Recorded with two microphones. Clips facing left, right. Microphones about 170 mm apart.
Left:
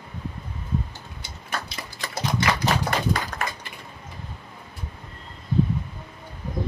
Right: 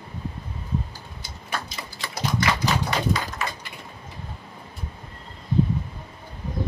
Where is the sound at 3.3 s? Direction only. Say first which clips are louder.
Even; 65° left (ahead or behind).